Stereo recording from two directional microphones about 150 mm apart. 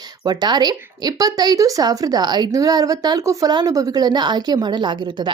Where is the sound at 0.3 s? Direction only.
30° right (ahead or behind).